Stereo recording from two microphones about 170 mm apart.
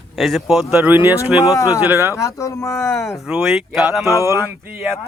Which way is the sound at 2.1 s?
20° left (ahead or behind).